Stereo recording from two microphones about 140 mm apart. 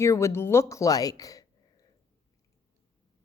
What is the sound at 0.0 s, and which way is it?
A woman's voice, 20° left (ahead or behind).